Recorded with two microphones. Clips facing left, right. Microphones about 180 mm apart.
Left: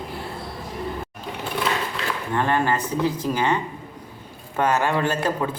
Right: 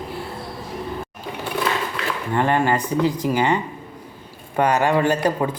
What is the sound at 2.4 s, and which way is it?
A man's voice, 15° right (ahead or behind).